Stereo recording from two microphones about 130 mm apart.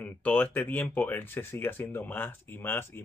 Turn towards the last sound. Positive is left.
turn(degrees=15)  # may be behind; listen again after turning